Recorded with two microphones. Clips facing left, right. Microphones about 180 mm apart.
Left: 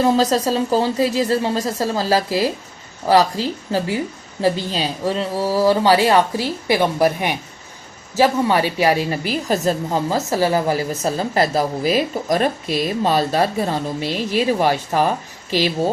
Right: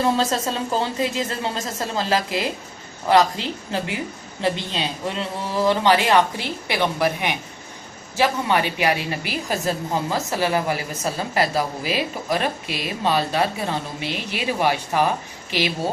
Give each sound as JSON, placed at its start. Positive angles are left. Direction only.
{"t": 0.0, "sound": "speech", "side_deg": 35}
{"t": 15.4, "sound": "speech", "side_deg": -15}